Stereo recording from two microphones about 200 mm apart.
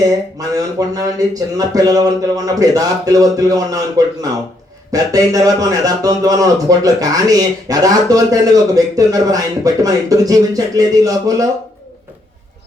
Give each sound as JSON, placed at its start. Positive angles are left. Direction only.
{"t": 0.0, "sound": "a man's voice", "side_deg": -20}